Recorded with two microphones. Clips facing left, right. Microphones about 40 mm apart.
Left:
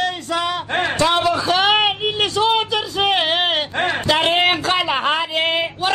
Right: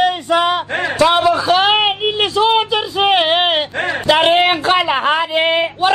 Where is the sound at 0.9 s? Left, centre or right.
Centre.